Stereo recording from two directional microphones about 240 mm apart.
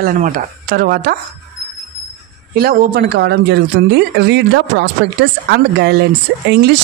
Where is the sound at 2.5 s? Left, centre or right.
Right.